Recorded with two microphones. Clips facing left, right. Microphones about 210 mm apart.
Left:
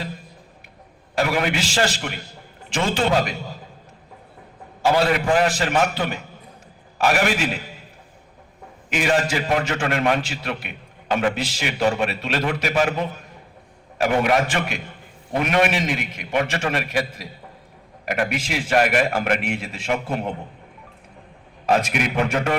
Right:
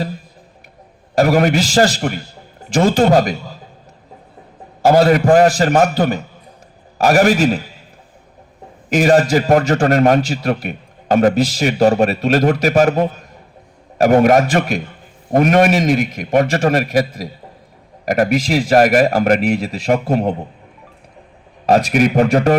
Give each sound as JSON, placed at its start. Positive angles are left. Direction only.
{"t": 1.1, "sound": "a man's voice", "side_deg": -40}
{"t": 4.8, "sound": "a man's voice", "side_deg": -40}
{"t": 8.9, "sound": "a man's voice", "side_deg": -40}
{"t": 21.7, "sound": "a man's voice", "side_deg": -40}